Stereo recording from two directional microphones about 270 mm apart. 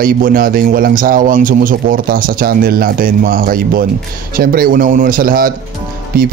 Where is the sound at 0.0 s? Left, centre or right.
Right.